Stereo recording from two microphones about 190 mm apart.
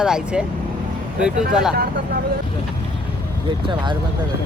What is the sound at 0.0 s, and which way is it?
Speech, 5° right (ahead or behind).